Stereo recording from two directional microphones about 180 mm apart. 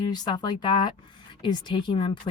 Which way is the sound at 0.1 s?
25° left (ahead or behind).